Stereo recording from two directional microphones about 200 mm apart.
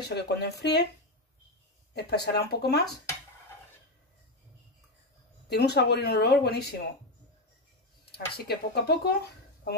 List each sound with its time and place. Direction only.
0.0 s speech: 55° left (ahead or behind)
2.0 s speech: 55° left (ahead or behind)
5.5 s speech: 55° left (ahead or behind)
8.0 s speech: 55° left (ahead or behind)